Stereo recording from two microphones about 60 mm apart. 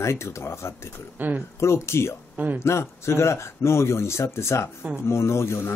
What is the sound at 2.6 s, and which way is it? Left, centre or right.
Speech, left.